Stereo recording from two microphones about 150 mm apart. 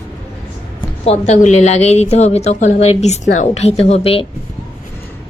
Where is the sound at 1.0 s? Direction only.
50° left (ahead or behind).